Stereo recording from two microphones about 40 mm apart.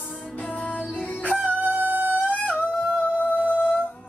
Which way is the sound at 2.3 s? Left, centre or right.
Left.